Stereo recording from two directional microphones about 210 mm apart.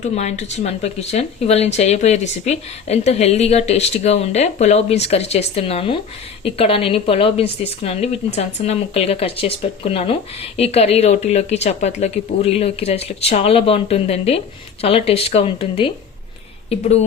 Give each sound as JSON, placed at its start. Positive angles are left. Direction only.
{"t": 0.0, "sound": "a woman's voice", "side_deg": 35}